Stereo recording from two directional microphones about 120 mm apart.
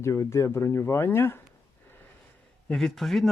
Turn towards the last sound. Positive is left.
turn(degrees=0)  # may be behind; listen again after turning